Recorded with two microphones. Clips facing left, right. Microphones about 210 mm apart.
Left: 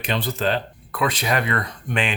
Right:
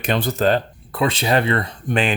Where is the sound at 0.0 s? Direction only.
50° right (ahead or behind).